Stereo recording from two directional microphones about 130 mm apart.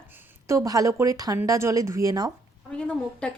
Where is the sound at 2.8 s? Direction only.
5° left (ahead or behind).